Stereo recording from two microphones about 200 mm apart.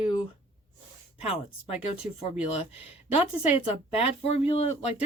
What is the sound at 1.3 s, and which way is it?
Speech, 30° left (ahead or behind).